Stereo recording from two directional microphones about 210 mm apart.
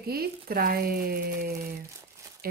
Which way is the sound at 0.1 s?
45° right (ahead or behind).